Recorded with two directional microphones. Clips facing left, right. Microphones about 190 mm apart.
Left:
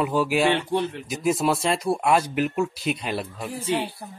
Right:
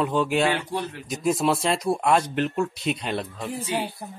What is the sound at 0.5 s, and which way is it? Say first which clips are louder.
Speech: left 4 dB; 25° left (ahead or behind).